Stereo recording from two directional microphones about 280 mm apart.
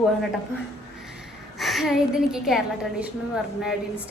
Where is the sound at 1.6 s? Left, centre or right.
Centre.